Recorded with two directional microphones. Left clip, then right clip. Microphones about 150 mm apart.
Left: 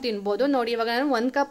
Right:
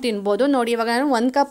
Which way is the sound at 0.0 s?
30° right (ahead or behind).